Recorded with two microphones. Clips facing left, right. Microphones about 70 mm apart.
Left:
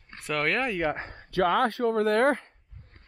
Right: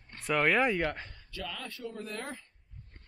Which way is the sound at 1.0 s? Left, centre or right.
Left.